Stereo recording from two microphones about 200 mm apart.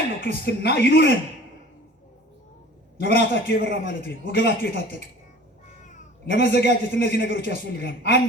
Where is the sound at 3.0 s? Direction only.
55° left (ahead or behind).